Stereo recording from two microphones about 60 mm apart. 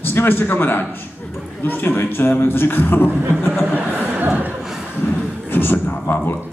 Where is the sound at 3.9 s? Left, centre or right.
Right.